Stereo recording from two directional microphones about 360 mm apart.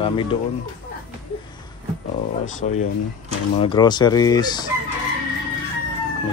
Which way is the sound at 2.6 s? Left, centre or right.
Left.